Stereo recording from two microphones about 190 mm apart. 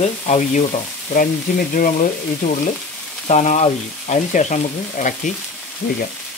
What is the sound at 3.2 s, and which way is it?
Speech, 40° left (ahead or behind).